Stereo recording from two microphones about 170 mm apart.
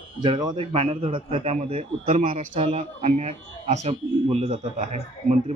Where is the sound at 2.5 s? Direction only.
35° right (ahead or behind).